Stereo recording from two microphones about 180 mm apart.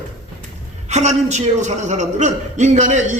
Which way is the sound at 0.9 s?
40° right (ahead or behind).